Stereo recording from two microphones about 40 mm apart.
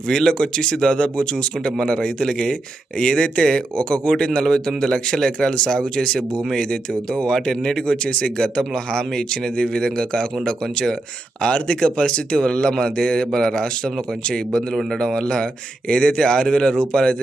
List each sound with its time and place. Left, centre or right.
0.1 s speech: centre
6.1 s speech: centre
6.6 s speech: left